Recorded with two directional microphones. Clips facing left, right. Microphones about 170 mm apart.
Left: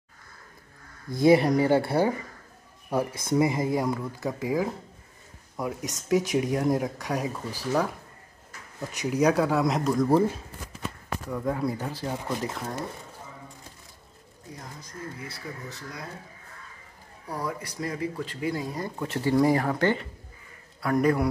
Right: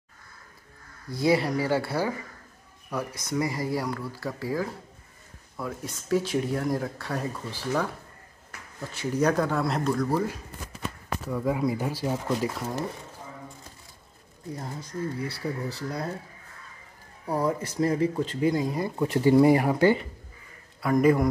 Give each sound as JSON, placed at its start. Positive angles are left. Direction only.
{"t": 1.2, "sound": "speech", "side_deg": 25}
{"t": 8.9, "sound": "speech", "side_deg": 10}
{"t": 10.0, "sound": "speech", "side_deg": 25}
{"t": 11.2, "sound": "speech", "side_deg": -5}
{"t": 14.6, "sound": "speech", "side_deg": -30}
{"t": 17.4, "sound": "a man's voice", "side_deg": -25}